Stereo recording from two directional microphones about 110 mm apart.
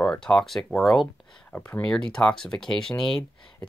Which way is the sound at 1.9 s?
5° left (ahead or behind).